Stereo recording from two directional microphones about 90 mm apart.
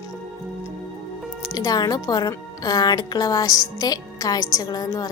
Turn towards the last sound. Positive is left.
turn(degrees=45)  # may be behind; listen again after turning